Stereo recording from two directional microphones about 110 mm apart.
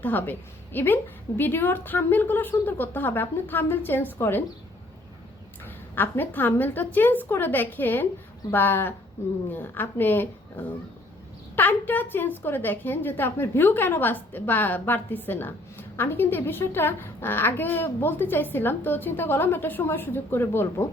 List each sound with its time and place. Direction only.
0.0 s a woman's voice: 15° left (ahead or behind)
5.6 s a woman's voice: 20° left (ahead or behind)
11.5 s a woman's voice: 15° left (ahead or behind)